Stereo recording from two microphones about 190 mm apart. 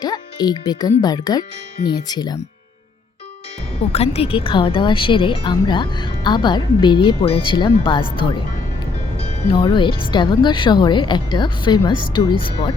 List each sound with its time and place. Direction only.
0.0 s speech: 20° left (ahead or behind)
3.9 s speech: 35° left (ahead or behind)
9.1 s speech: 30° left (ahead or behind)